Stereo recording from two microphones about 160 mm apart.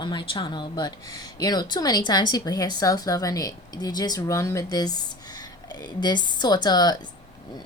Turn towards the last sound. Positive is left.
turn(degrees=25)  # may be behind; listen again after turning